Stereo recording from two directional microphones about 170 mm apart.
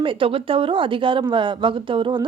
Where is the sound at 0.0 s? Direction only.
30° right (ahead or behind).